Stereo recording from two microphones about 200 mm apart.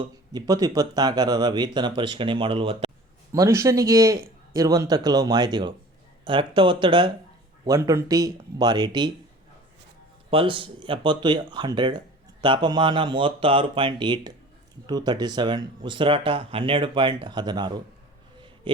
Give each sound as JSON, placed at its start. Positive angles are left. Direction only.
{"t": 0.0, "sound": "speech", "side_deg": -20}
{"t": 3.3, "sound": "a man's voice", "side_deg": -15}
{"t": 10.2, "sound": "speech", "side_deg": -25}